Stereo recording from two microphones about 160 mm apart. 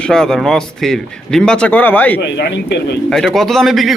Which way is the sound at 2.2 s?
90° left.